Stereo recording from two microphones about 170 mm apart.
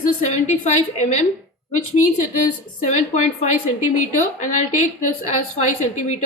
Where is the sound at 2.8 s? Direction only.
45° left (ahead or behind).